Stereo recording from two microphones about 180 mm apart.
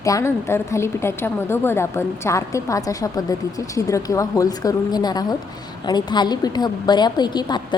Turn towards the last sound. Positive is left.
turn(degrees=25)  # may be behind; listen again after turning